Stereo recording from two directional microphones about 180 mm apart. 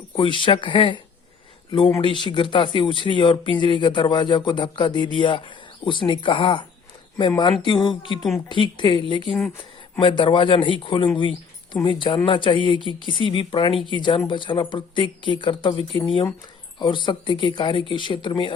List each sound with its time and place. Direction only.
0.2 s speech: 30° left (ahead or behind)
16.7 s speech: 25° left (ahead or behind)